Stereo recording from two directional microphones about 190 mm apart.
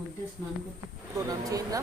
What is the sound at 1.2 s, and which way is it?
Speech, 20° right (ahead or behind).